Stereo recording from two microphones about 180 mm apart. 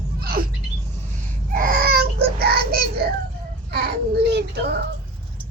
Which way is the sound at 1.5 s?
55° right (ahead or behind).